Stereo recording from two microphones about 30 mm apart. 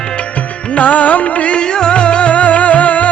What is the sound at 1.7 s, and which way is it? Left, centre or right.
Music, left.